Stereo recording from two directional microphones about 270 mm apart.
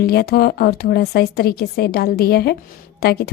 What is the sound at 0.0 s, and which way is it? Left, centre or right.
A woman's voice, left.